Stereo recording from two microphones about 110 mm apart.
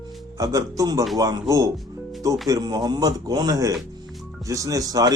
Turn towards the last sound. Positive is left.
turn(degrees=-35)  # may be behind; listen again after turning